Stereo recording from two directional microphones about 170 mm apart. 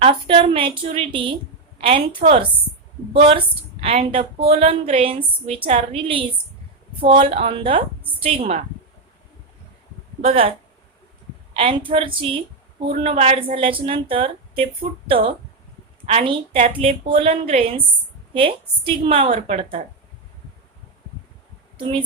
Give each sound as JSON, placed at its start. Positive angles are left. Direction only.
{"t": 0.0, "sound": "a woman's voice", "side_deg": -35}
{"t": 10.2, "sound": "a woman's voice", "side_deg": -35}
{"t": 11.5, "sound": "a woman's voice", "side_deg": -30}
{"t": 21.8, "sound": "a woman's voice", "side_deg": -30}